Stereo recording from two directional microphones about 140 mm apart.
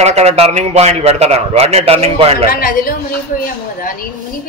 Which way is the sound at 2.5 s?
90° left.